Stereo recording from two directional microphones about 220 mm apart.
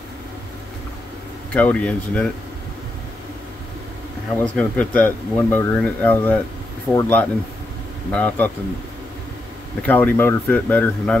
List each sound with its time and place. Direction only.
1.5 s speech: 5° left (ahead or behind)
4.4 s speech: 5° left (ahead or behind)
9.8 s speech: 10° left (ahead or behind)